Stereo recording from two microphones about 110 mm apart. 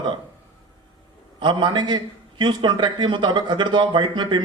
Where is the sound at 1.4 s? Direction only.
45° right (ahead or behind).